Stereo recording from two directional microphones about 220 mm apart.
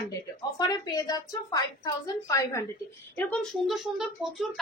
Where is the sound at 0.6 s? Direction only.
15° left (ahead or behind).